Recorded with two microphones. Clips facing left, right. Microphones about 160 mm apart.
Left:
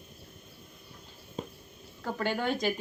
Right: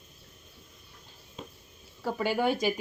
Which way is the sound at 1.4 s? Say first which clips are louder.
Left 6 dB; 40° left (ahead or behind).